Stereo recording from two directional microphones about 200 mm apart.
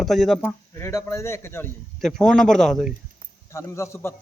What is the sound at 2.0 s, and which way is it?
Speech, centre (ahead or behind).